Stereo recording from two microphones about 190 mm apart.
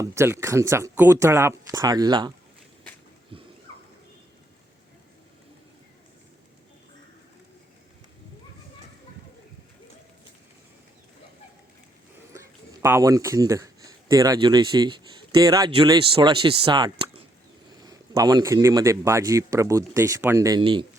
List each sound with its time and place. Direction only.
0.0 s a man's voice: 15° right (ahead or behind)
12.3 s a man's voice: 15° right (ahead or behind)